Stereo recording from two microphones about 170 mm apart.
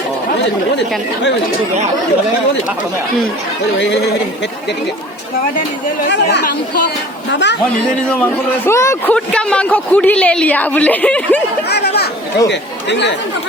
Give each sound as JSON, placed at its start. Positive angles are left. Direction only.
{"t": 3.8, "sound": "speech", "side_deg": 90}
{"t": 7.3, "sound": "speech", "side_deg": 90}
{"t": 8.1, "sound": "a woman's voice", "side_deg": 10}
{"t": 9.1, "sound": "a woman's voice", "side_deg": 5}
{"t": 11.7, "sound": "speech", "side_deg": 75}
{"t": 12.5, "sound": "speech", "side_deg": 90}